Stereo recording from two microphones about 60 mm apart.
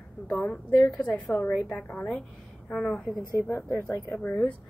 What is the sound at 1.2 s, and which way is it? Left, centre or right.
A woman's voice, left.